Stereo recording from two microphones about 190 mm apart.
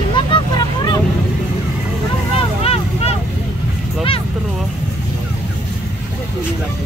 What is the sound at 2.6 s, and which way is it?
Vehicle, 30° left (ahead or behind).